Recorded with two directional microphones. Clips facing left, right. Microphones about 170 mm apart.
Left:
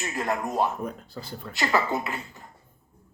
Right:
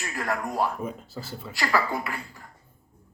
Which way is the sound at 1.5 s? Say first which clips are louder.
Left 1 dB; 20° left (ahead or behind).